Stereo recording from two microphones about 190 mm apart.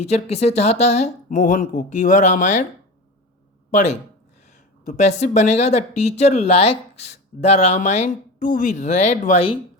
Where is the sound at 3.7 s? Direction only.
40° left (ahead or behind).